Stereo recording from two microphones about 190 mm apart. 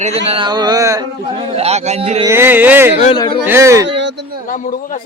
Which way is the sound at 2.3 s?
10° right (ahead or behind).